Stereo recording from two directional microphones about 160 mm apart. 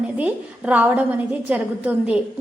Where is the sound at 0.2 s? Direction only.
10° right (ahead or behind).